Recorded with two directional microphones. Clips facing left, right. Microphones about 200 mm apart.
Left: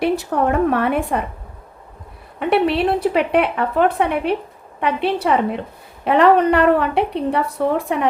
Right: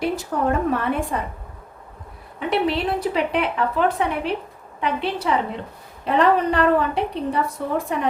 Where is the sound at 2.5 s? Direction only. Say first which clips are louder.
Left 5 dB; 60° left (ahead or behind).